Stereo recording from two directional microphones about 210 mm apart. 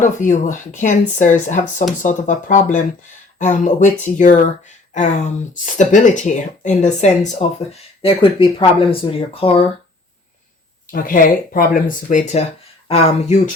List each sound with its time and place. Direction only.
0.0 s speech: 35° left (ahead or behind)
10.9 s speech: 40° left (ahead or behind)